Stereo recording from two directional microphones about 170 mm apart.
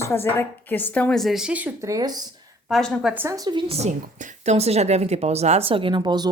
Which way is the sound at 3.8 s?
45° right (ahead or behind).